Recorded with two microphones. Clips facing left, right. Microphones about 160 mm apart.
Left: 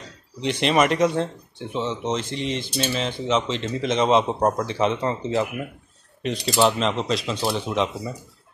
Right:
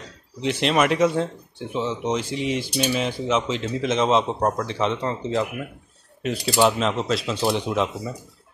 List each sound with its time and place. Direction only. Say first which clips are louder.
0.4 s speech: left 1 dB; centre (ahead or behind)